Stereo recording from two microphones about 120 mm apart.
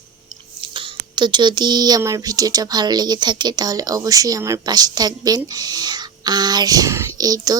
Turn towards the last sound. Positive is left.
turn(degrees=-30)  # may be behind; listen again after turning